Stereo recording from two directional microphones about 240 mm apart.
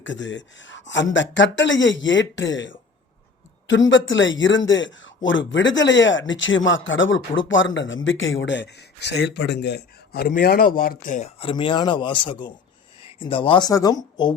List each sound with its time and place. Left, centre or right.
0.0 s speech: left; by 14.3 s centre